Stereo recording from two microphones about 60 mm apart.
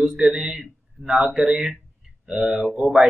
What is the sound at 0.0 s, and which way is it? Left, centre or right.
Speech, centre.